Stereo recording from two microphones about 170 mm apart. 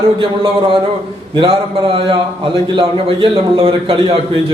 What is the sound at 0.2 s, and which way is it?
A man's voice, 30° right (ahead or behind).